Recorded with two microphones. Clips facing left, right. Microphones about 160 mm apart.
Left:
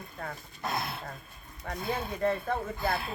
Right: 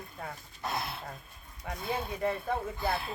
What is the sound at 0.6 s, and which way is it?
Speech, centre (ahead or behind).